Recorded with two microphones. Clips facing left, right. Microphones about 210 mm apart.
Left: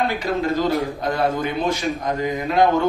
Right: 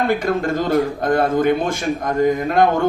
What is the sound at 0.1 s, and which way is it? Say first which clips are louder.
Speech: right 3 dB; 50° right (ahead or behind).